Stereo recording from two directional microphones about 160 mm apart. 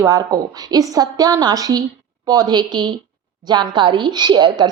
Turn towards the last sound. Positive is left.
turn(degrees=-25)  # may be behind; listen again after turning